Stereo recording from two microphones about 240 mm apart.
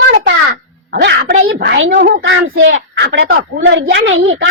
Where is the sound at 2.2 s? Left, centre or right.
Right.